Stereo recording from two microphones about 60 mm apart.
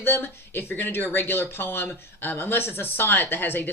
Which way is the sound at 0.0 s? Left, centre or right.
Left.